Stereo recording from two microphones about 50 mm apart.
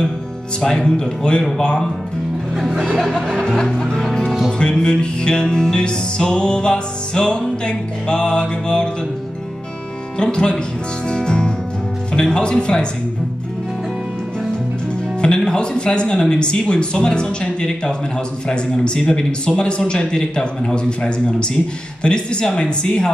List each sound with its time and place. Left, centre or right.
0.6 s music: centre
2.5 s speech: centre
3.0 s music: centre
4.3 s music: centre
4.6 s music: centre
10.1 s music: centre
15.2 s speech: centre
18.5 s music: centre
22.0 s speech: centre